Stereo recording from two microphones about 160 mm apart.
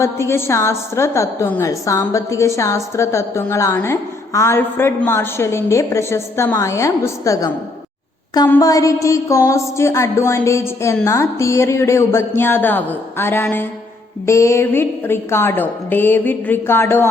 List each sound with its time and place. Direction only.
0.0 s a woman's voice: 15° left (ahead or behind)
8.4 s a sound: 15° left (ahead or behind)
11.0 s a woman's voice: 20° left (ahead or behind)